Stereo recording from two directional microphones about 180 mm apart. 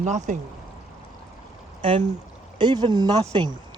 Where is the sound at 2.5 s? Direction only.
25° right (ahead or behind).